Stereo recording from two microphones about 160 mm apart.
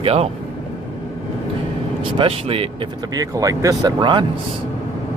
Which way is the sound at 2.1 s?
35° right (ahead or behind).